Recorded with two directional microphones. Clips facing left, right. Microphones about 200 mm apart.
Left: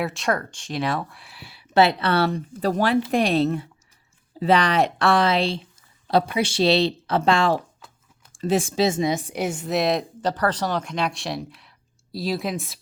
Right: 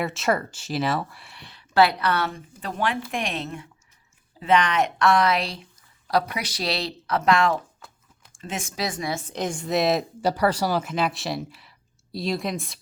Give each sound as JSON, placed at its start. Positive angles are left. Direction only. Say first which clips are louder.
{"t": 0.0, "sound": "speech", "louder": "even", "side_deg": 0}
{"t": 1.7, "sound": "speech", "louder": "left 2 dB", "side_deg": 25}